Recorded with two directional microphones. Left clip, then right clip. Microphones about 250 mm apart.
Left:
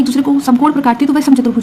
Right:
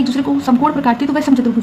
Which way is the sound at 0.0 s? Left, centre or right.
Left.